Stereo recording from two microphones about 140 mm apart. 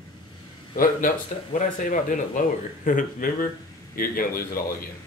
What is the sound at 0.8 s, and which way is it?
Speech, 80° left.